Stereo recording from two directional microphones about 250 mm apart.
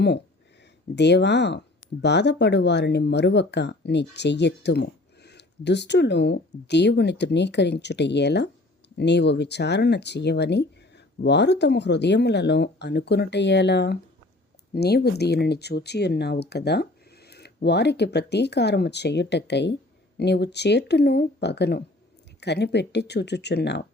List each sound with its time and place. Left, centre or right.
0.9 s speech: left